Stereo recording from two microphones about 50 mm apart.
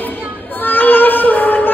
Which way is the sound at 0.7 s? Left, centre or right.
Left.